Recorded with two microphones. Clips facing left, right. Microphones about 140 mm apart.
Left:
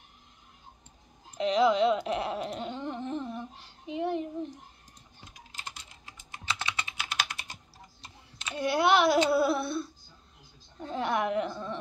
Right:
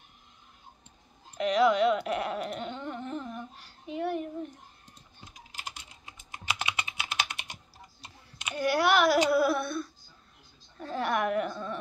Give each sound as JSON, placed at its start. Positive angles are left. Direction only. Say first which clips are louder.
{"t": 1.4, "sound": "speech", "louder": "even", "side_deg": 25}
{"t": 2.7, "sound": "humming", "louder": "left 2 dB", "side_deg": 25}
{"t": 6.0, "sound": "typing", "louder": "right 1 dB", "side_deg": -15}
{"t": 8.5, "sound": "speech", "louder": "even", "side_deg": 25}